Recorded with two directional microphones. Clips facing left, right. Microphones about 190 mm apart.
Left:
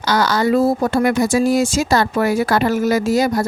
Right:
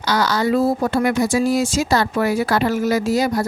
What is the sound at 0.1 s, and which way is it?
Speech, 50° left (ahead or behind).